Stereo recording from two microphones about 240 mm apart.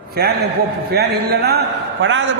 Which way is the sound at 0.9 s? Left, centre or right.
Right.